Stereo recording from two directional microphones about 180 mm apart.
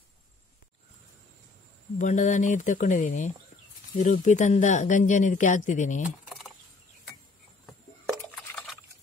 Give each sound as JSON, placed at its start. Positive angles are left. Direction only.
{"t": 2.0, "sound": "speech", "side_deg": 45}
{"t": 6.2, "sound": "a sound", "side_deg": 0}
{"t": 8.4, "sound": "liquid", "side_deg": 0}